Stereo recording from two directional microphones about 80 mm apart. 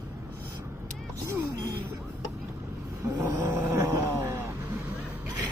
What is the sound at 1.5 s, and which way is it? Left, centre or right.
Music, right.